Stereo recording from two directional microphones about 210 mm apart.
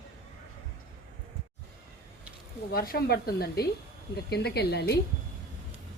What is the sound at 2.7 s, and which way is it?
Speech, 45° left (ahead or behind).